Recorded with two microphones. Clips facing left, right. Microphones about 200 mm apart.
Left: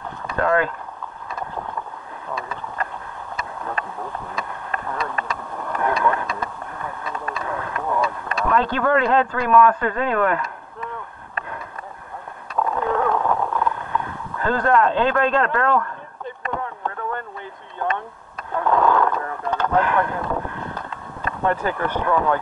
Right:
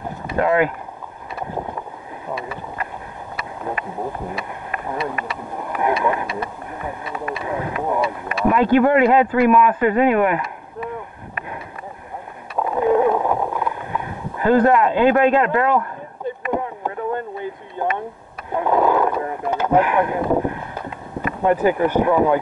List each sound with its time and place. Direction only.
0.4 s speech: 15° right (ahead or behind)
4.3 s speech: 15° right (ahead or behind)
12.5 s a sound: 15° right (ahead or behind)
20.3 s boat: 15° right (ahead or behind)
21.2 s speech: 15° right (ahead or behind)